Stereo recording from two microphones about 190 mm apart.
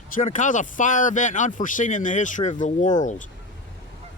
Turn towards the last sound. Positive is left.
turn(degrees=40)  # may be behind; listen again after turning